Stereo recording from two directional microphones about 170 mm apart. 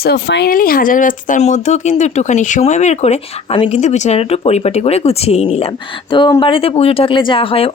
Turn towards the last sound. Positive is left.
turn(degrees=35)  # may be behind; listen again after turning